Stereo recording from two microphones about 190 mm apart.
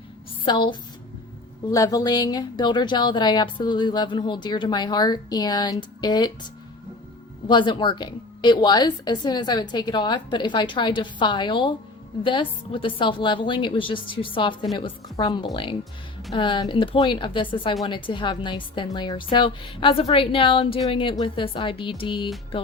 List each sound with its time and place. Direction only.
0.4 s speech: 25° left (ahead or behind)
7.4 s speech: 25° left (ahead or behind)